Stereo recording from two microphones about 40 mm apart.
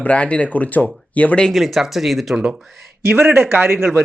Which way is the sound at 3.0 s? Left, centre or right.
Right.